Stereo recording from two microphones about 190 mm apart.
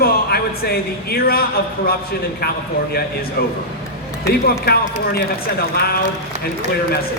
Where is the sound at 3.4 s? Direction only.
55° left (ahead or behind).